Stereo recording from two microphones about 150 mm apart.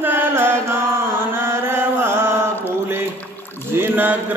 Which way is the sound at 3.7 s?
15° right (ahead or behind).